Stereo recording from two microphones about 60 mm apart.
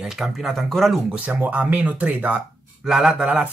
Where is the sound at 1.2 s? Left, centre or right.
Right.